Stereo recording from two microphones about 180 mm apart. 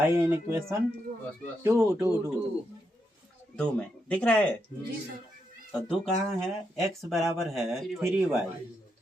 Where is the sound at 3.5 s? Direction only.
5° left (ahead or behind).